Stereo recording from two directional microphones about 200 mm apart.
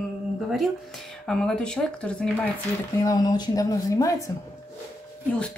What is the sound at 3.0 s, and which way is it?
Speech, 20° left (ahead or behind).